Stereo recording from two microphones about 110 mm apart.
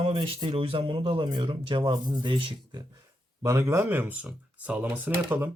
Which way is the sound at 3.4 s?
25° right (ahead or behind).